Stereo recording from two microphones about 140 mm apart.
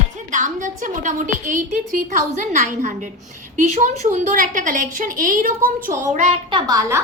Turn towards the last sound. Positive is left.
turn(degrees=-25)  # may be behind; listen again after turning